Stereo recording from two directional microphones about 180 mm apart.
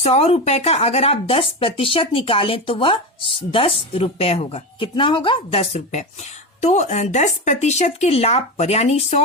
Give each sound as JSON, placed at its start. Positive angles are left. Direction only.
{"t": 0.0, "sound": "speech", "side_deg": 35}